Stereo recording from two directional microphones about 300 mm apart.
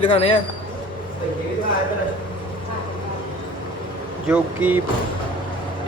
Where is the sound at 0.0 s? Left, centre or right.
Centre.